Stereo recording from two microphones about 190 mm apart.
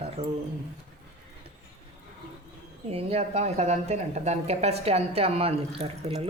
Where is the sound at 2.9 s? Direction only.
35° right (ahead or behind).